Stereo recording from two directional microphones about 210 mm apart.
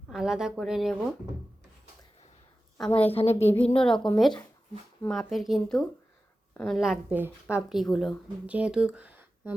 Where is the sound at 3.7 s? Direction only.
5° left (ahead or behind).